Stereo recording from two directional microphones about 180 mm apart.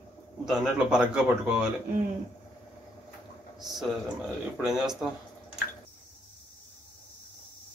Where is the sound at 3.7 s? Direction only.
Centre (ahead or behind).